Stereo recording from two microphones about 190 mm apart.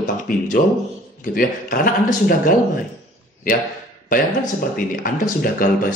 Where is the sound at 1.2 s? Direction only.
50° left (ahead or behind).